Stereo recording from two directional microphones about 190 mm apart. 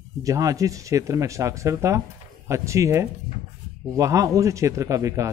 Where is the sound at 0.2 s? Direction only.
15° right (ahead or behind).